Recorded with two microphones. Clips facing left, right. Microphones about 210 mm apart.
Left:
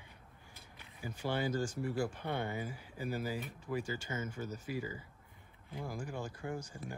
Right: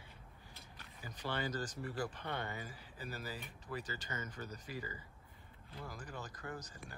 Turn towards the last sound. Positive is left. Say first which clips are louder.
# left 6 dB
turn(degrees=10)  # may be behind; listen again after turning